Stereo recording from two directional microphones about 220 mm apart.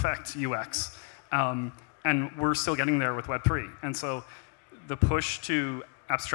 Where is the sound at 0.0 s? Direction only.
5° left (ahead or behind).